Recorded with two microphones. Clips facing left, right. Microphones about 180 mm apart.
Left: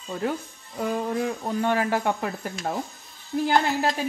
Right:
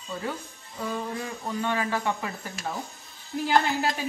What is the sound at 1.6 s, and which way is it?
Speech, 50° left (ahead or behind).